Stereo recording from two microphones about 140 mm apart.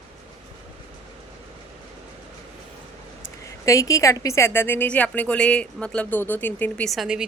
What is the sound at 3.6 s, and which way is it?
A woman's voice, 20° left (ahead or behind).